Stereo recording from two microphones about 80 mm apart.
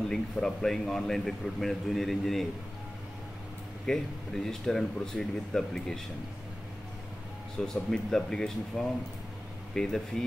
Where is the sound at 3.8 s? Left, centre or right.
Centre.